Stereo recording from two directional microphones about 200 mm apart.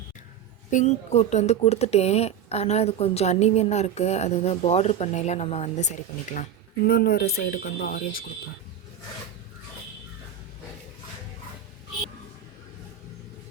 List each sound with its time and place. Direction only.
0.7 s speech: 35° left (ahead or behind)
6.3 s speech: 50° left (ahead or behind)